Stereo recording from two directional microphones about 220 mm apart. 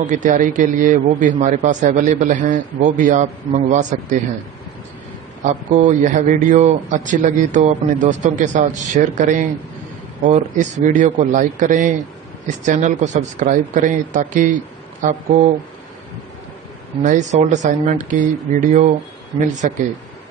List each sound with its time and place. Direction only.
0.0 s a man's voice: 35° right (ahead or behind)
5.4 s a man's voice: 35° right (ahead or behind)
17.0 s a man's voice: 35° right (ahead or behind)